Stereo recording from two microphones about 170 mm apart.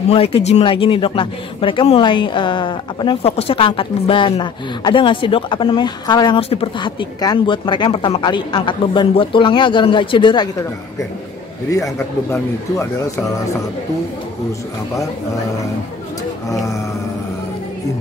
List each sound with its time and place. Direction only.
0.1 s speech: 35° left (ahead or behind)
11.7 s speech: 20° left (ahead or behind)